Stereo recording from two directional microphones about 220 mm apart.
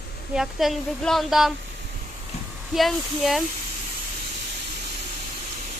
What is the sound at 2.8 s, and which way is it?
Speech, centre (ahead or behind).